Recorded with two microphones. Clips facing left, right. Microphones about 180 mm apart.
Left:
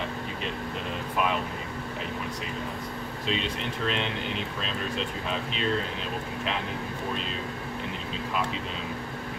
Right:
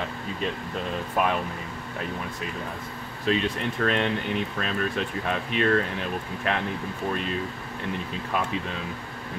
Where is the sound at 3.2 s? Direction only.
50° right (ahead or behind).